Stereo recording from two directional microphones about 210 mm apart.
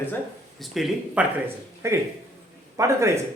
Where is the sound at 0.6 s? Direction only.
Centre (ahead or behind).